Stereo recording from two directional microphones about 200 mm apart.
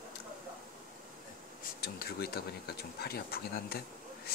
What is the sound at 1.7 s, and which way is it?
Speech, 50° left (ahead or behind).